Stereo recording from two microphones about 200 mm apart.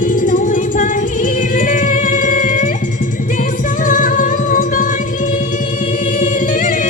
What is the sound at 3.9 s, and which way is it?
Music, 40° left (ahead or behind).